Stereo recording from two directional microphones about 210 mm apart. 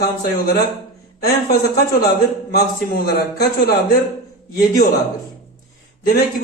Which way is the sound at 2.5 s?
50° left (ahead or behind).